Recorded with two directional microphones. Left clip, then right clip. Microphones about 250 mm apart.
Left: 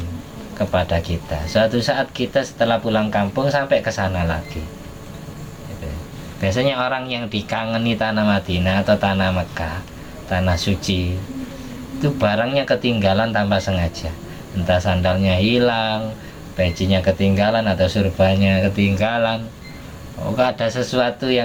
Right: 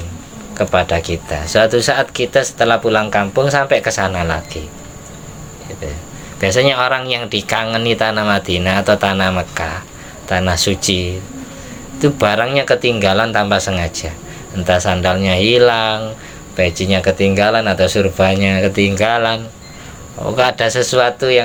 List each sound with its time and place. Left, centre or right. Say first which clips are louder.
0.6 s speech: right 6 dB; right
6.4 s speech: right 7 dB; right